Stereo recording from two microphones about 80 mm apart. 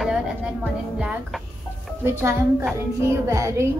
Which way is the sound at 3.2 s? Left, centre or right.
Right.